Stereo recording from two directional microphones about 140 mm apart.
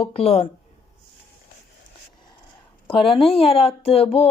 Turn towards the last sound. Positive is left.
turn(degrees=45)  # may be behind; listen again after turning